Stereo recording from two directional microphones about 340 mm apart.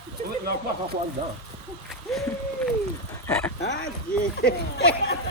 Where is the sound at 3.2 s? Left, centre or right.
Centre.